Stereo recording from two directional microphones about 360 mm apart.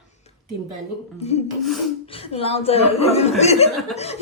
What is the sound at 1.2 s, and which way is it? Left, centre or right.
Speech, centre.